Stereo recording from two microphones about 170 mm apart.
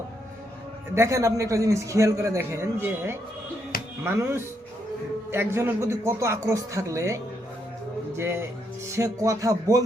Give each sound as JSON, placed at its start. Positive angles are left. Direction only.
{"t": 0.9, "sound": "a man's voice", "side_deg": -15}